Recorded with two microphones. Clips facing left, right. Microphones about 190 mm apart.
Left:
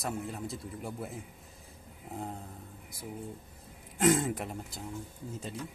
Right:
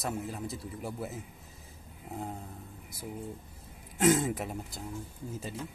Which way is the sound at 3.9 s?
5° right (ahead or behind).